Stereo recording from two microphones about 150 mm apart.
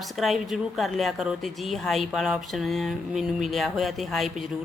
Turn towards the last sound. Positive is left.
turn(degrees=0)  # may be behind; listen again after turning